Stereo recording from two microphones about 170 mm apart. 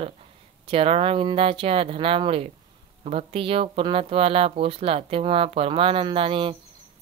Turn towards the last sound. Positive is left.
turn(degrees=-30)  # may be behind; listen again after turning